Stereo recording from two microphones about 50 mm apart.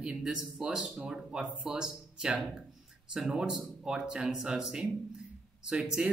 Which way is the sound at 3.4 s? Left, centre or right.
Centre.